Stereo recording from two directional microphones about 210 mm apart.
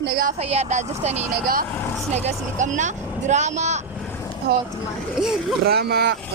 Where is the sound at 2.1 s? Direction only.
35° right (ahead or behind).